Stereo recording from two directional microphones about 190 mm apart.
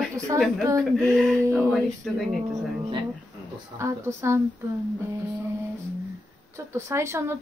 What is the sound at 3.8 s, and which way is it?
Speech, 15° right (ahead or behind).